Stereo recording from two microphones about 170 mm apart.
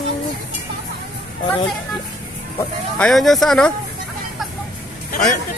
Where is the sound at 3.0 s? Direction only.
Centre (ahead or behind).